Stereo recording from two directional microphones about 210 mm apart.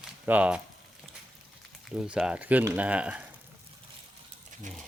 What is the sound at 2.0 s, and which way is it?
Speech, 5° right (ahead or behind).